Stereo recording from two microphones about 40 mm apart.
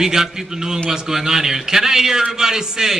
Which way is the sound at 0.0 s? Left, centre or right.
Centre.